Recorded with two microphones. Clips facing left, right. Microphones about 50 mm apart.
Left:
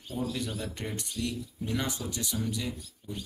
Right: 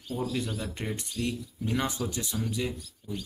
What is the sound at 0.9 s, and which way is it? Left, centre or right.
Speech, right.